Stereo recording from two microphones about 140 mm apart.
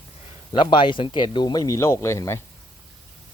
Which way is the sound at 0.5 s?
35° left (ahead or behind).